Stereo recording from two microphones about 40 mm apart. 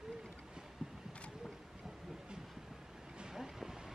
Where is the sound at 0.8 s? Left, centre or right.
Centre.